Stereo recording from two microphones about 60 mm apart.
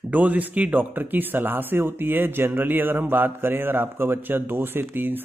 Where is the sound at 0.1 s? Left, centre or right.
Right.